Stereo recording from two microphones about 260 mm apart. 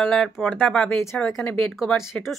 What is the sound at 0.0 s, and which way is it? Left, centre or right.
A woman's voice, centre.